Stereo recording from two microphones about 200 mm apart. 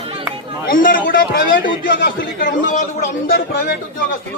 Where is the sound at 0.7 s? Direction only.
45° left (ahead or behind).